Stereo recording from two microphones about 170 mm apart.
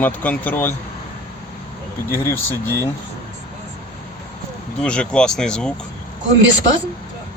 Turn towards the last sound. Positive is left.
turn(degrees=-90)